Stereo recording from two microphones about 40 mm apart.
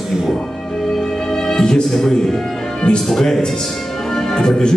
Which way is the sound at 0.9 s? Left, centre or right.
Centre.